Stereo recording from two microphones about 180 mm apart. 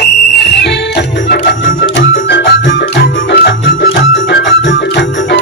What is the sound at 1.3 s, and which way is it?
Music, 90° left.